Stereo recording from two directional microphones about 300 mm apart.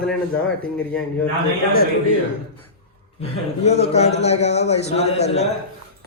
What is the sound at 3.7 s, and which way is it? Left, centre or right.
A man's voice, left.